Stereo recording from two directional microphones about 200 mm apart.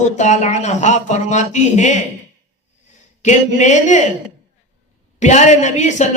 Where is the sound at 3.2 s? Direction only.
35° left (ahead or behind).